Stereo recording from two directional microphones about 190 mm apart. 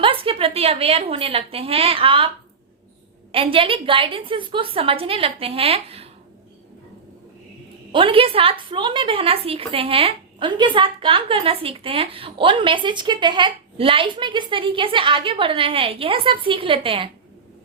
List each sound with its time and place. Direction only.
0.0 s a woman's voice: 30° right (ahead or behind)
3.3 s a woman's voice: 30° right (ahead or behind)
7.9 s a woman's voice: 30° right (ahead or behind)